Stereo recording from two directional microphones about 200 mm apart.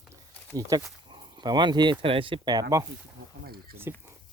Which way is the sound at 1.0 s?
25° right (ahead or behind).